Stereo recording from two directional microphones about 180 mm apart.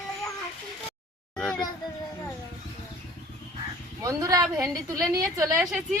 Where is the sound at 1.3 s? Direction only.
5° left (ahead or behind).